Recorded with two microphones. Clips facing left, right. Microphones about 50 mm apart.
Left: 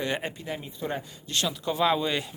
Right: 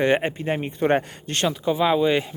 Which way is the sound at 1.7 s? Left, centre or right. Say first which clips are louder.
Right 6 dB; centre.